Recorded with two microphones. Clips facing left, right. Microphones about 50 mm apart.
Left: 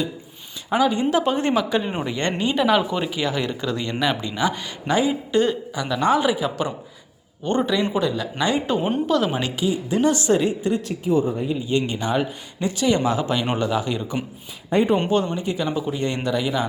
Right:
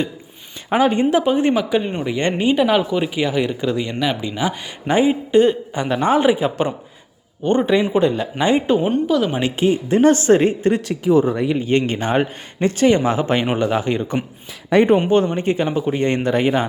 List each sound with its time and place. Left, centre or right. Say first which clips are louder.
0.7 s a man's voice: right 4 dB; right
1.1 s speech: right 4 dB; centre
4.9 s a man's voice: right 5 dB; right
8.8 s speech: right 3 dB; centre
9.6 s a man's voice: right 7 dB; right
10.8 s a man's voice: right 5 dB; right
14.7 s speech: right 5 dB; right
15.4 s a man's voice: right 5 dB; right